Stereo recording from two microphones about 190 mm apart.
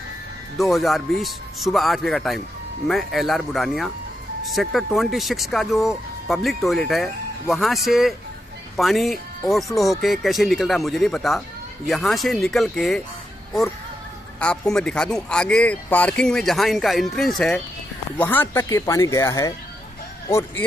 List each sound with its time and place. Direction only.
0.6 s speech: centre (ahead or behind)
14.4 s speech: 5° left (ahead or behind)